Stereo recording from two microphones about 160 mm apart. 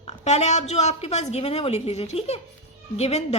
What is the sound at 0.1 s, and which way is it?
A woman's voice, 45° left (ahead or behind).